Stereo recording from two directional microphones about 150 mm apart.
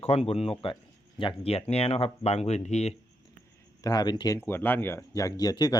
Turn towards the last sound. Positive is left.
turn(degrees=25)  # may be behind; listen again after turning